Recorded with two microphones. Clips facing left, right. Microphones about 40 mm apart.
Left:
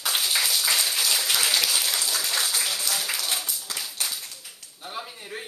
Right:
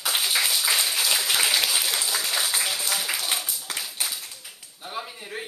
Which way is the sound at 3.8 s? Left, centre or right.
Centre.